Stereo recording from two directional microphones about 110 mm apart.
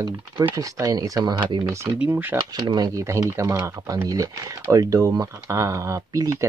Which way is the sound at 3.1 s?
30° right (ahead or behind).